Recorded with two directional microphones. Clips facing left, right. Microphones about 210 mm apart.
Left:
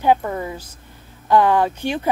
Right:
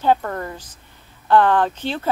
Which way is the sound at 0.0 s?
10° left (ahead or behind).